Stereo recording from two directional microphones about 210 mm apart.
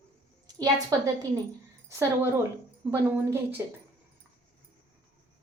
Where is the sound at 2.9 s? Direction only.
10° right (ahead or behind).